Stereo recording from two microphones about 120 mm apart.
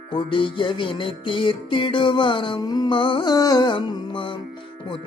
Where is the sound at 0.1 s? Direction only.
45° left (ahead or behind).